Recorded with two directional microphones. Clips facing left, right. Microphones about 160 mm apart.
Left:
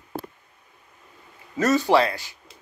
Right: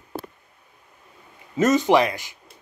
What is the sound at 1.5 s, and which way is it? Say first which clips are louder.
Speech: right 2 dB; 20° right (ahead or behind).